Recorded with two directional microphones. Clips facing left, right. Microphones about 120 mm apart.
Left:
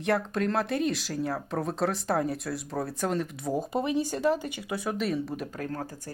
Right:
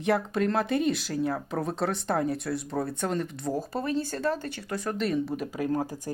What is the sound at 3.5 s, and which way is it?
Speech, 15° left (ahead or behind).